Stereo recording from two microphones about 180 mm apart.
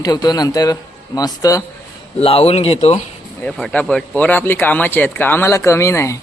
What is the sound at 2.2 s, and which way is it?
Speech, 35° left (ahead or behind).